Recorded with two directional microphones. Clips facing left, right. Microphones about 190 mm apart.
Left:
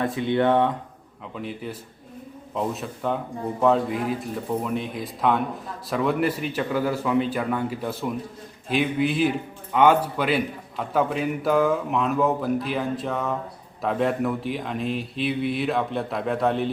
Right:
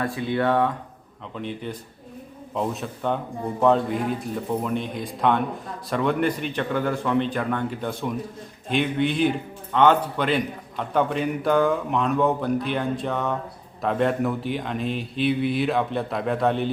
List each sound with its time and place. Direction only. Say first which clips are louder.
0.0 s speech: left 2 dB; 20° left (ahead or behind)
1.4 s a man's voice: right 1 dB; 5° left (ahead or behind)